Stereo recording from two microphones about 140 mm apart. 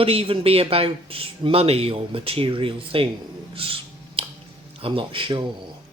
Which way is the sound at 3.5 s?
40° right (ahead or behind).